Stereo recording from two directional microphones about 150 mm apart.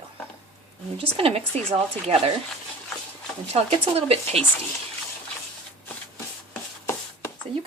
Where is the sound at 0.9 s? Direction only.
40° right (ahead or behind).